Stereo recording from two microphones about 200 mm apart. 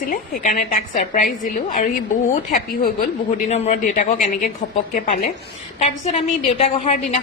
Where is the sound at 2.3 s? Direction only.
40° left (ahead or behind).